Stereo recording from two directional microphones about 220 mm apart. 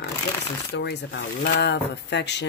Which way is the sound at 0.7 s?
50° left (ahead or behind).